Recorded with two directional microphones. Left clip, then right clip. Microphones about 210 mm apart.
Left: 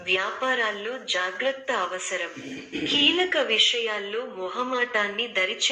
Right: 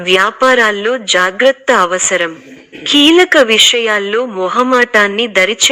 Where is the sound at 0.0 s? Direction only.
45° right (ahead or behind).